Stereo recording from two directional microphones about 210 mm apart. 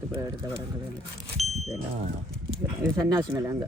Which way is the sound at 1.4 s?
Centre (ahead or behind).